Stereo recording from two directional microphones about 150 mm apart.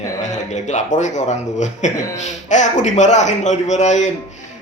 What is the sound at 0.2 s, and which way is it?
A man's voice, 50° left (ahead or behind).